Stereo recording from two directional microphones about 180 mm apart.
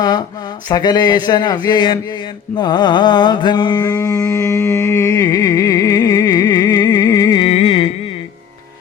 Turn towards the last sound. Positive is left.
turn(degrees=30)  # may be behind; listen again after turning